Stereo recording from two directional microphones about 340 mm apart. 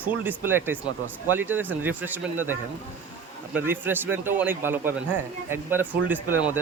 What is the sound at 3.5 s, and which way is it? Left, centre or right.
Speech, centre.